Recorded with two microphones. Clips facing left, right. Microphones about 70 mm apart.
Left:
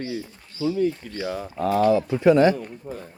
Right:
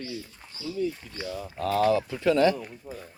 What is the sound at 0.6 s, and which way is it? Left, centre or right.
Speech, left.